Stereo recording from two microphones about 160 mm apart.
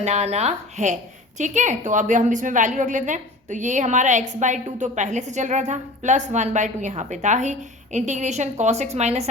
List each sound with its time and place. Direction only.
0.0 s a woman's voice: 45° right (ahead or behind)